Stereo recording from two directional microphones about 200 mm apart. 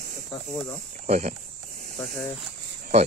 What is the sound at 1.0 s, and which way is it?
Speech, 35° right (ahead or behind).